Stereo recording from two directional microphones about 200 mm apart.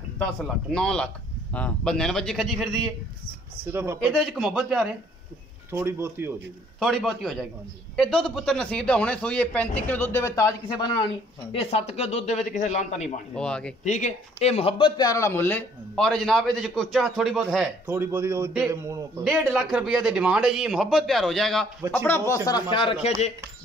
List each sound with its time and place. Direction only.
0.2 s a man's voice: 5° left (ahead or behind)
3.7 s a man's voice: 10° right (ahead or behind)
4.1 s a man's voice: centre (ahead or behind)
6.8 s a man's voice: centre (ahead or behind); by 13.1 s 35° left (ahead or behind)
13.3 s a man's voice: 5° left (ahead or behind)
13.8 s a man's voice: 35° left (ahead or behind); by 17.6 s centre (ahead or behind)
17.8 s a man's voice: 10° right (ahead or behind)
19.2 s a man's voice: 5° right (ahead or behind); by 23.1 s 25° left (ahead or behind)